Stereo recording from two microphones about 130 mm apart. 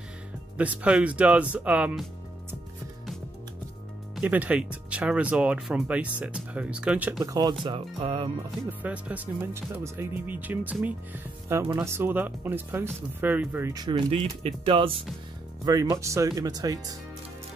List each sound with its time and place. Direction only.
0.6 s speech: 10° right (ahead or behind)
4.2 s speech: 10° right (ahead or behind)
7.2 s speech: 30° right (ahead or behind)
7.6 s speech: 40° right (ahead or behind)
8.6 s speech: 10° right (ahead or behind)
13.7 s speech: 35° right (ahead or behind)
15.6 s speech: 30° right (ahead or behind)